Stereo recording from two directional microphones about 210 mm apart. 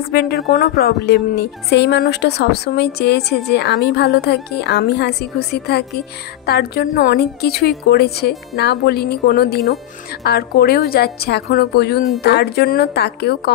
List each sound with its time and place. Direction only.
0.1 s speech: 50° left (ahead or behind)